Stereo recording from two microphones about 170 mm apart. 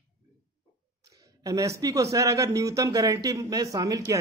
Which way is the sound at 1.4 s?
20° right (ahead or behind).